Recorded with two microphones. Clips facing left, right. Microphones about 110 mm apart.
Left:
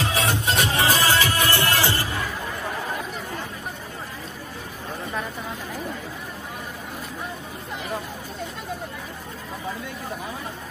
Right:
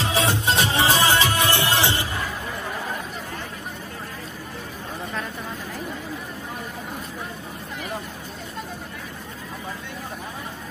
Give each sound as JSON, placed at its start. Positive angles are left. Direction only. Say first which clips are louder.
{"t": 0.1, "sound": "music", "louder": "right 2 dB", "side_deg": -30}